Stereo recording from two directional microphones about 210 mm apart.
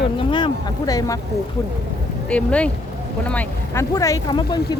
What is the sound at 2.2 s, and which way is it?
Speech, 5° left (ahead or behind).